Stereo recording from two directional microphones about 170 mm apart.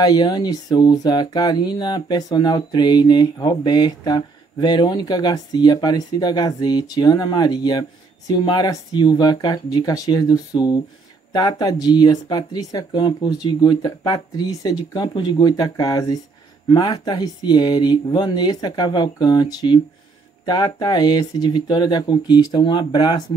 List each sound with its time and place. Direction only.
0.0 s speech: 25° left (ahead or behind)